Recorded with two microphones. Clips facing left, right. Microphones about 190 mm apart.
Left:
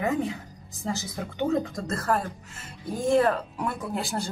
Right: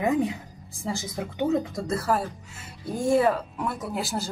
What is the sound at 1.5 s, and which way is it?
Speech, 5° right (ahead or behind).